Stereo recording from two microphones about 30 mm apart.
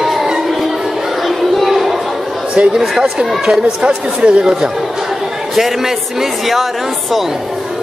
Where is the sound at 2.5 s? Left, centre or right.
Right.